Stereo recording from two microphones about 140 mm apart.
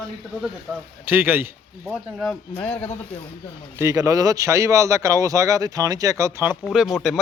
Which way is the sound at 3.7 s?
20° right (ahead or behind).